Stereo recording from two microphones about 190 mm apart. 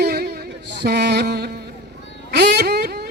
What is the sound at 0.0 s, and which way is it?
Music, 55° right (ahead or behind).